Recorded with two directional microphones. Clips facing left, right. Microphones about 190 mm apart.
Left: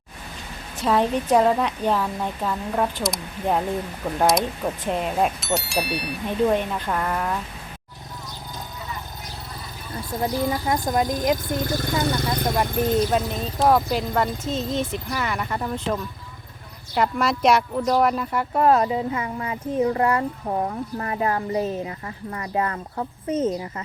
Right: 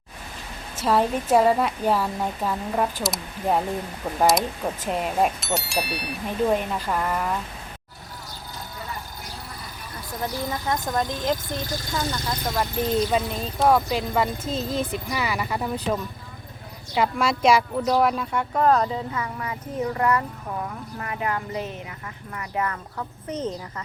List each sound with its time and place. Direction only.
0.8 s a woman's voice: 5° right (ahead or behind)
9.9 s a sound: 25° left (ahead or behind)
10.5 s speech: 10° left (ahead or behind)
11.4 s speech: 55° left (ahead or behind)
13.1 s a woman's voice: centre (ahead or behind)
19.1 s speech: 25° left (ahead or behind)
20.5 s speech: 40° left (ahead or behind)